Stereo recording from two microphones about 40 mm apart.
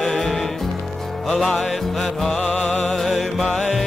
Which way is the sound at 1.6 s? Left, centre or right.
Centre.